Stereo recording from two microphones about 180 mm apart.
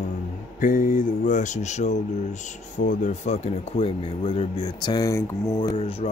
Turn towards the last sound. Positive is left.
turn(degrees=35)  # may be behind; listen again after turning